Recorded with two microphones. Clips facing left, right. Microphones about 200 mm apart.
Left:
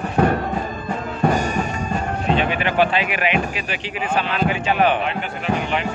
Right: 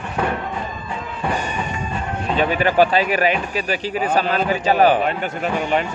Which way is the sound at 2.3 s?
40° right (ahead or behind).